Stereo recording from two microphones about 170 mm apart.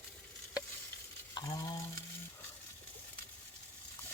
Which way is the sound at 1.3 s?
25° left (ahead or behind).